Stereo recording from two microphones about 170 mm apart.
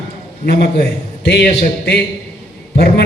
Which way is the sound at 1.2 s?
80° left.